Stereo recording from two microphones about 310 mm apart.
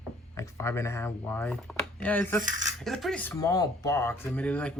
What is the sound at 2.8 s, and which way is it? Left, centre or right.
Speech, centre.